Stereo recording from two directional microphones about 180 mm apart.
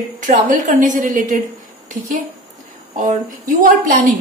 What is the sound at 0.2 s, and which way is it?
A woman's voice, 45° right (ahead or behind).